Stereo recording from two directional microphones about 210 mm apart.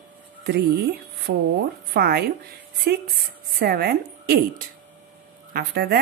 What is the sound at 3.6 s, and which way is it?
Speech, 45° right (ahead or behind).